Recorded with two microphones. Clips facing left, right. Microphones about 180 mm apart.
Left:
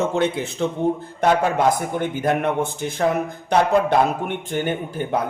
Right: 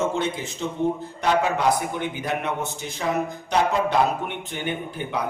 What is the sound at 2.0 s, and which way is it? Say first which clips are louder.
Speech: left 6 dB; 50° left (ahead or behind).